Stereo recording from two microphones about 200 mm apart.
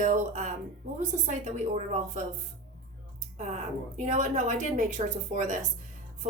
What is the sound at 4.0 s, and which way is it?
Speech, 35° right (ahead or behind).